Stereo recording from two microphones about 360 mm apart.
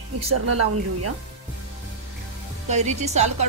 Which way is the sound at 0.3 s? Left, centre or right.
Right.